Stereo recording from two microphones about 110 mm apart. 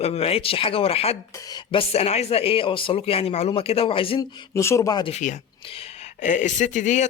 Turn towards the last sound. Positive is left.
turn(degrees=90)